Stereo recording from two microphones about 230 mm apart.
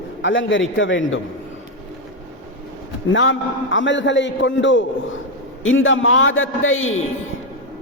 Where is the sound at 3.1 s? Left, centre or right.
Left.